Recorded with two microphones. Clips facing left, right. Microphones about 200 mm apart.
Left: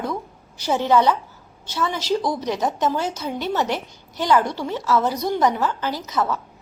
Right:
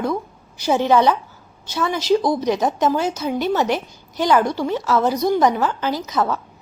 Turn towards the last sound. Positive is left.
turn(degrees=-15)  # may be behind; listen again after turning